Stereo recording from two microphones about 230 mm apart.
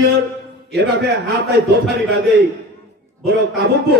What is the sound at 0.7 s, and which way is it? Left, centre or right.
Speech, right.